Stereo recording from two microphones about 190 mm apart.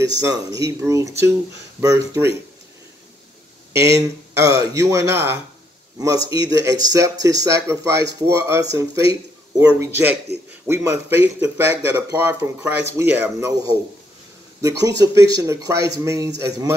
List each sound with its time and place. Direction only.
0.0 s speech: 15° right (ahead or behind)
3.7 s speech: 15° right (ahead or behind)
6.2 s speech: 25° left (ahead or behind)
6.6 s speech: 15° right (ahead or behind)
15.0 s speech: 20° right (ahead or behind)